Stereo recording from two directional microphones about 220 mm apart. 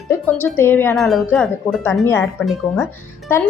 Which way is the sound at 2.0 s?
10° left (ahead or behind).